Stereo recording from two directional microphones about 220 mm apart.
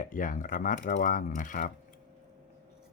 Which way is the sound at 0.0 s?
35° left (ahead or behind).